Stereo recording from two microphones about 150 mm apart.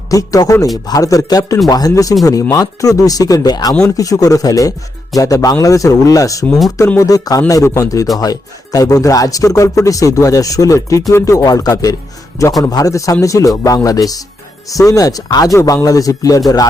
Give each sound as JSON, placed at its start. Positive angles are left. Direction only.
{"t": 0.1, "sound": "speech", "side_deg": 25}